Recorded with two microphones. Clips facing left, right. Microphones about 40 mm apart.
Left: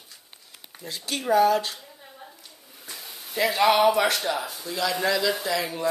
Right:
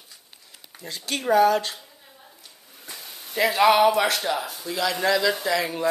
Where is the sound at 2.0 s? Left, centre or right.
Centre.